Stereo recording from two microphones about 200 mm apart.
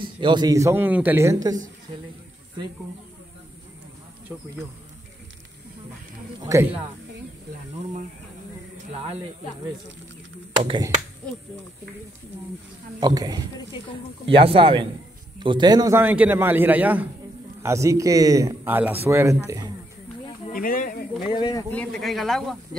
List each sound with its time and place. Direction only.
0.0 s speech: 25° right (ahead or behind)
6.4 s speech: 15° right (ahead or behind)
13.0 s speech: 20° right (ahead or behind)
20.5 s speech: 45° left (ahead or behind)
21.3 s speech: 20° left (ahead or behind)
21.6 s speech: 5° left (ahead or behind)